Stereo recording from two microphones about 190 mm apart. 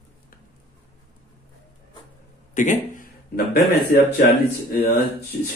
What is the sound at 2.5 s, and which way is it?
A man's voice, 40° left (ahead or behind).